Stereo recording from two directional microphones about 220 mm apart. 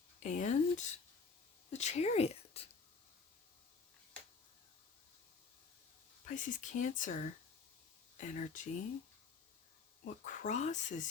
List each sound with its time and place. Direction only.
0.2 s speech: 35° left (ahead or behind)
1.7 s a sound: 30° left (ahead or behind)
6.2 s speech: 35° left (ahead or behind)
10.2 s speech: 35° left (ahead or behind)